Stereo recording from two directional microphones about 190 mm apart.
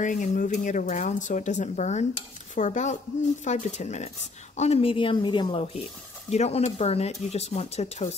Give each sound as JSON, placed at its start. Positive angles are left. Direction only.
{"t": 0.0, "sound": "a woman's voice", "side_deg": 40}